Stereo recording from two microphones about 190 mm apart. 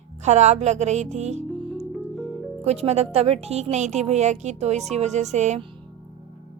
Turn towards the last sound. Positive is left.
turn(degrees=-35)  # may be behind; listen again after turning